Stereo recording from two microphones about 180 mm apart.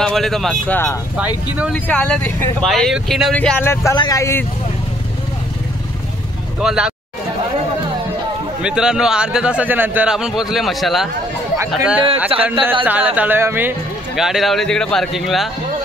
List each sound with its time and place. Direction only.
0.0 s speech: centre (ahead or behind)
1.1 s speech: 10° right (ahead or behind)
1.7 s speech: 5° left (ahead or behind)
6.6 s speech: 5° right (ahead or behind)
8.6 s speech: 5° right (ahead or behind)
12.3 s speech: 30° right (ahead or behind)
12.8 s speech: 10° right (ahead or behind)